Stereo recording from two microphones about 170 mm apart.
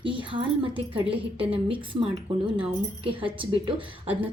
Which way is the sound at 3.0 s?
30° right (ahead or behind).